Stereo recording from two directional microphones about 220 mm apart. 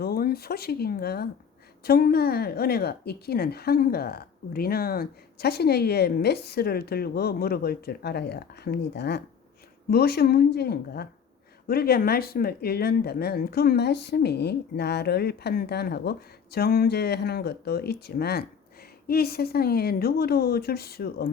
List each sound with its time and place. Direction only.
0.0 s a woman's voice: 45° left (ahead or behind)